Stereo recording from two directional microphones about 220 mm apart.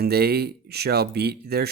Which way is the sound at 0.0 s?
45° right (ahead or behind).